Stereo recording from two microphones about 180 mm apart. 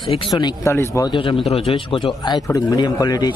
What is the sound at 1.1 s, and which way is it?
Speech, 30° left (ahead or behind).